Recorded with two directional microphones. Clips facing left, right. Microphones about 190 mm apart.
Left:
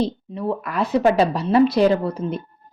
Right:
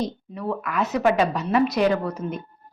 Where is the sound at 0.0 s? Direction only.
25° left (ahead or behind).